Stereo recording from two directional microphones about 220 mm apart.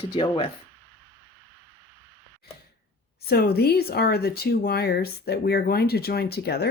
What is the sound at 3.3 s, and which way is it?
Speech, 45° left (ahead or behind).